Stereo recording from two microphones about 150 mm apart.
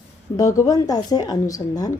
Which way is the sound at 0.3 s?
20° left (ahead or behind).